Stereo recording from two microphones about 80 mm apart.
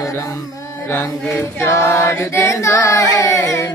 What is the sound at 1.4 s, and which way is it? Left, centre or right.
Carnatic music, left.